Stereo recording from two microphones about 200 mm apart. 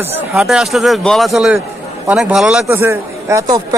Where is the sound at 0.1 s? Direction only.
5° right (ahead or behind).